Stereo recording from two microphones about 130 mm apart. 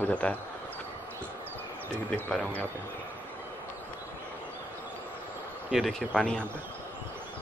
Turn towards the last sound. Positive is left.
turn(degrees=5)  # may be behind; listen again after turning